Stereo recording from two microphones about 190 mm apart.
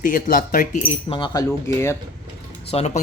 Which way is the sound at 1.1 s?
25° left (ahead or behind).